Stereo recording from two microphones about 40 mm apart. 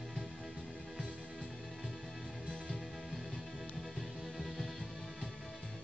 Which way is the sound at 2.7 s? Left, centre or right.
Centre.